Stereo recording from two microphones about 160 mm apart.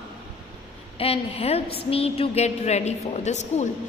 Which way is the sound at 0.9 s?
35° left (ahead or behind).